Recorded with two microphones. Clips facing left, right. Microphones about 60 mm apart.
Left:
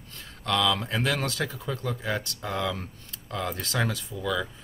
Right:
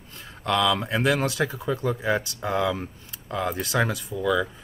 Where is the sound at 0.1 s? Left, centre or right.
Centre.